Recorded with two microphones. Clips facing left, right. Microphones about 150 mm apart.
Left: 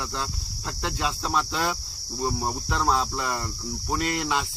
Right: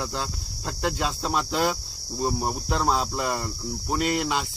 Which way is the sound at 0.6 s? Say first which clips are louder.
Right 2 dB; 40° right (ahead or behind).